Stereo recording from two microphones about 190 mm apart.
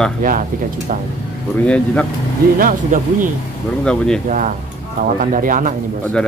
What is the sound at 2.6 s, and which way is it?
Speech, 45° right (ahead or behind).